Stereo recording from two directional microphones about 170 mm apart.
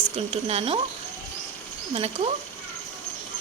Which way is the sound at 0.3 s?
35° right (ahead or behind).